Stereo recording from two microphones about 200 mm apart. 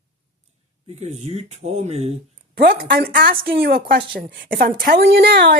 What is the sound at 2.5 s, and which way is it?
Speech, 50° right (ahead or behind).